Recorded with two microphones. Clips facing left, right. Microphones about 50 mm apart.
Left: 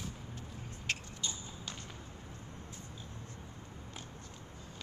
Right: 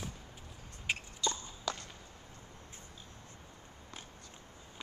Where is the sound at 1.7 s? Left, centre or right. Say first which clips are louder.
Right 10 dB; right.